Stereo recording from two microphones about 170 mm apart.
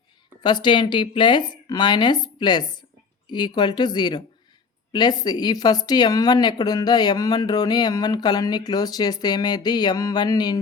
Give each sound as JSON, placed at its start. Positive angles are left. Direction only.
{"t": 0.4, "sound": "speech", "side_deg": 25}